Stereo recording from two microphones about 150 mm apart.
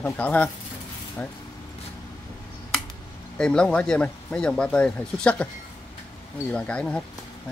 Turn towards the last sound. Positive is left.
turn(degrees=5)  # may be behind; listen again after turning